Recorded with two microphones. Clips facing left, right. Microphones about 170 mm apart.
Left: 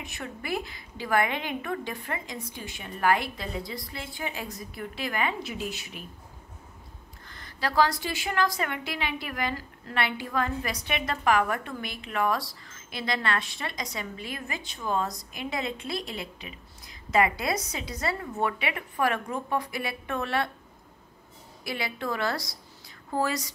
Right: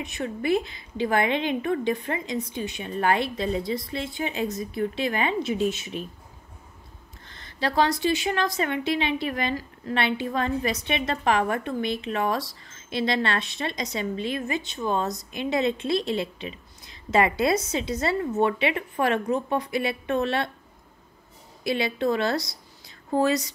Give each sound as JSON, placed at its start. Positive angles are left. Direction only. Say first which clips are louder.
{"t": 0.0, "sound": "a woman's voice", "louder": "right 9 dB", "side_deg": -20}
{"t": 7.2, "sound": "a woman's voice", "louder": "right 4 dB", "side_deg": -25}
{"t": 21.6, "sound": "a woman's voice", "louder": "right 8 dB", "side_deg": -25}